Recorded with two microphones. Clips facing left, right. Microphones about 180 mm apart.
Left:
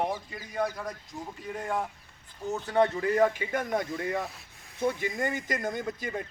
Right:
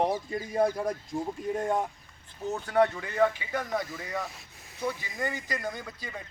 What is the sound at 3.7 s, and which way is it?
Speech, 50° left (ahead or behind).